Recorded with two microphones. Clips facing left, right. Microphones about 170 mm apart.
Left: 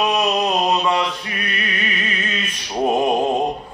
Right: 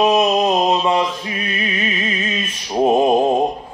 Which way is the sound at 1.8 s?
70° left (ahead or behind).